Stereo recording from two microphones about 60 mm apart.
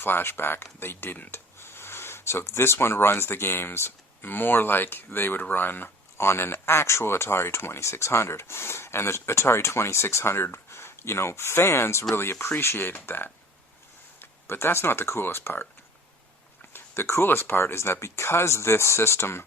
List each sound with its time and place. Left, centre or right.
0.0 s speech: left
16.7 s speech: left